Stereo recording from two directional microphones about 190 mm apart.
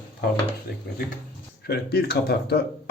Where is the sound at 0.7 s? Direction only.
50° left (ahead or behind).